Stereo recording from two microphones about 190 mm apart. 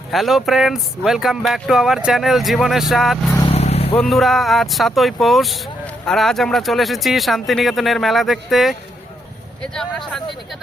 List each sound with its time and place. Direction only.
0.1 s speech: centre (ahead or behind)
3.4 s vehicle: 35° left (ahead or behind)
3.9 s speech: centre (ahead or behind)
9.7 s speech: centre (ahead or behind)